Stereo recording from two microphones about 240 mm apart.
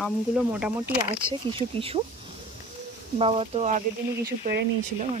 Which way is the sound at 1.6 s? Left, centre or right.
Right.